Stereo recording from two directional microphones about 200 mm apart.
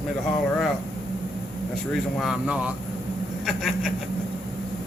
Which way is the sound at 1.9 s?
Centre (ahead or behind).